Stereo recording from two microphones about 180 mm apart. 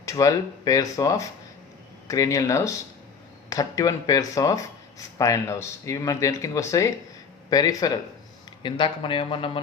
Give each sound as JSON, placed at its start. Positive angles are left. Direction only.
{"t": 0.0, "sound": "speech", "side_deg": 20}